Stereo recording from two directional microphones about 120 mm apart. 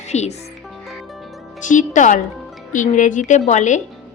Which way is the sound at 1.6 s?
90° left.